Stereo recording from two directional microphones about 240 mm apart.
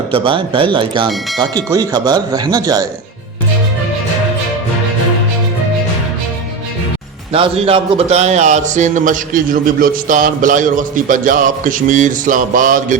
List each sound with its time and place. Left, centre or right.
0.1 s speech: right
7.3 s a man's voice: right